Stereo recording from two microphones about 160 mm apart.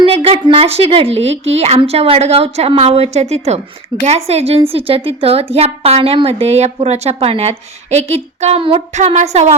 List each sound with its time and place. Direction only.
0.0 s a woman's voice: 35° right (ahead or behind)